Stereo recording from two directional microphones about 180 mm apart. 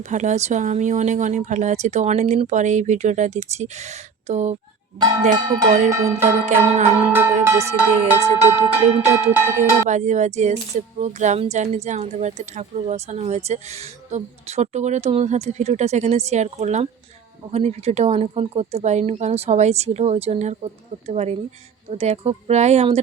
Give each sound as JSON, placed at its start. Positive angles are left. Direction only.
{"t": 0.0, "sound": "speech", "side_deg": -40}
{"t": 4.9, "sound": "a sound", "side_deg": -25}
{"t": 5.2, "sound": "speech", "side_deg": -40}
{"t": 5.9, "sound": "music", "side_deg": -15}
{"t": 9.9, "sound": "speech", "side_deg": -40}